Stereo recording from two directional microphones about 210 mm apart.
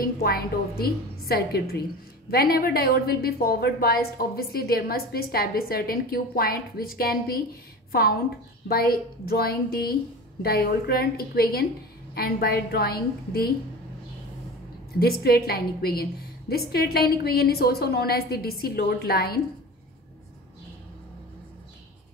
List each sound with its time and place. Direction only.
0.0 s a woman's voice: 45° left (ahead or behind)
8.6 s a woman's voice: 45° left (ahead or behind)
15.0 s a woman's voice: 50° left (ahead or behind)